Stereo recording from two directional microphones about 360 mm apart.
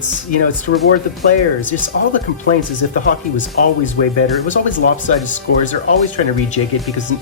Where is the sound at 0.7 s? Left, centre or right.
Left.